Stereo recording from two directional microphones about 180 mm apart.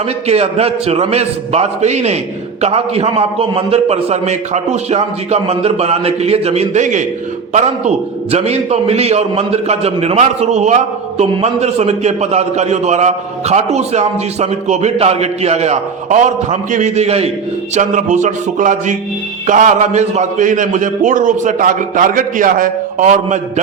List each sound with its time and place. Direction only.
0.3 s a man's voice: 35° right (ahead or behind)